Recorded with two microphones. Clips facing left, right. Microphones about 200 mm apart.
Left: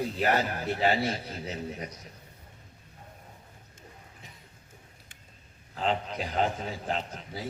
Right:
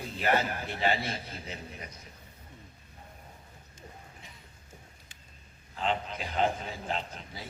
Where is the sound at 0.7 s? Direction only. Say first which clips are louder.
Left 5 dB; 40° left (ahead or behind).